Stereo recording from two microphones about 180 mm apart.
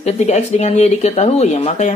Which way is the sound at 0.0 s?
40° left (ahead or behind).